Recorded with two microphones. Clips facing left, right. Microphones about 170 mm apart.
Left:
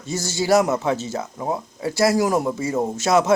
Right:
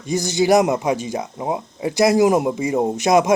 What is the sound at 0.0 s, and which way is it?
Speech, 15° right (ahead or behind).